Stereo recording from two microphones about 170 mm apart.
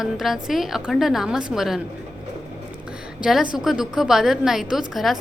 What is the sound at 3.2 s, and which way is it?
A woman's voice, 5° right (ahead or behind).